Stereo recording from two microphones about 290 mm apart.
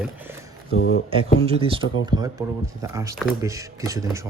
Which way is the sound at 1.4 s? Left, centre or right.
Centre.